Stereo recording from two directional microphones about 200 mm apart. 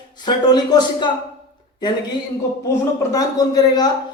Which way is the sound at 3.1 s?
20° left (ahead or behind).